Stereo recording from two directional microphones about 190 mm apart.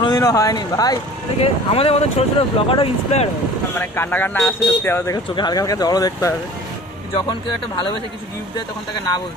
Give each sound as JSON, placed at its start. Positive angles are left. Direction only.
{"t": 0.0, "sound": "speech", "side_deg": 20}
{"t": 1.4, "sound": "speech", "side_deg": 30}
{"t": 3.8, "sound": "speech", "side_deg": 10}